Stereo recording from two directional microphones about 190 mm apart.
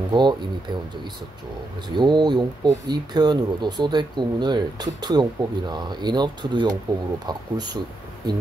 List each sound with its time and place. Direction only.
0.1 s speech: 25° right (ahead or behind)
1.9 s speech: 25° right (ahead or behind)